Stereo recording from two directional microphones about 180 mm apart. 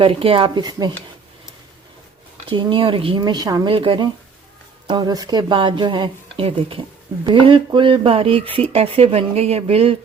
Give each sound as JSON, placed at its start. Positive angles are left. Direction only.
{"t": 0.0, "sound": "speech", "side_deg": -30}
{"t": 2.5, "sound": "a woman's voice", "side_deg": -25}